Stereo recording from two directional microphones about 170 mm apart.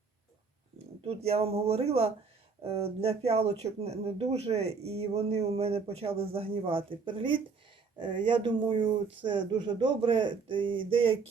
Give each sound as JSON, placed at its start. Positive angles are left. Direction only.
{"t": 1.0, "sound": "speech", "side_deg": -35}